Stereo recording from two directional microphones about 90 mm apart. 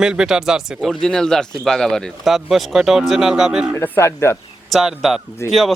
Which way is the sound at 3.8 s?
25° left (ahead or behind).